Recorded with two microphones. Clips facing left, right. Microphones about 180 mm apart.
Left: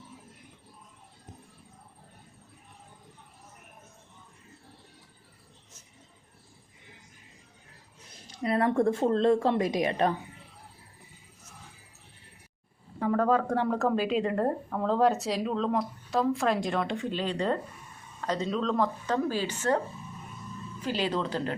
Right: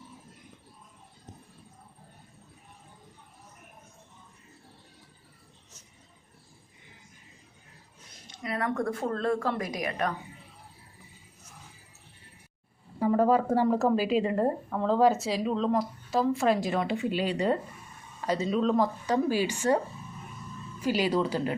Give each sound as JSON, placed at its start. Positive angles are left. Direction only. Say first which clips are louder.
{"t": 8.3, "sound": "speech", "louder": "left 5 dB", "side_deg": 30}
{"t": 13.0, "sound": "a woman's voice", "louder": "right 2 dB", "side_deg": -5}
{"t": 20.8, "sound": "speech", "louder": "right 4 dB", "side_deg": -10}